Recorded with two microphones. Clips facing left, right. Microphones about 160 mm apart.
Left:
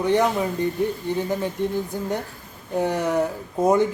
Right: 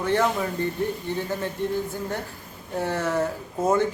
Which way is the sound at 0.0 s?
15° left (ahead or behind).